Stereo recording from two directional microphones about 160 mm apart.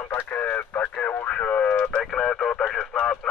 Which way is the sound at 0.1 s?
15° left (ahead or behind).